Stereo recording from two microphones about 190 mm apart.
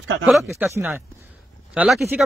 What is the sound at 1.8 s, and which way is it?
Speech, centre (ahead or behind).